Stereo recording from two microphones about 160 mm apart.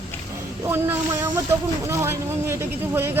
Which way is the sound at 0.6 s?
15° right (ahead or behind).